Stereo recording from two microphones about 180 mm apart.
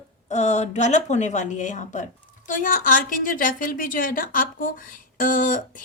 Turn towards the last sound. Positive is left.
turn(degrees=50)  # may be behind; listen again after turning